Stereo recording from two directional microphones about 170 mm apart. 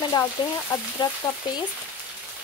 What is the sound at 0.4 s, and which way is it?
Speech, 30° left (ahead or behind).